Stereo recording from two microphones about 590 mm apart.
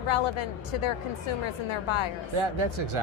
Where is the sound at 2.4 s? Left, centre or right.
Right.